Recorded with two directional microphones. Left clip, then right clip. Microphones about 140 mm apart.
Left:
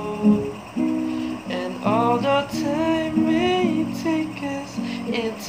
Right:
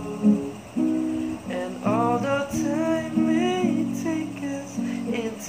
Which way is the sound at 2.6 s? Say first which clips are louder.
Left 3 dB; 20° left (ahead or behind).